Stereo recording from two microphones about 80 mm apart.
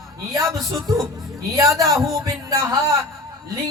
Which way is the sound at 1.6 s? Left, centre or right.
Right.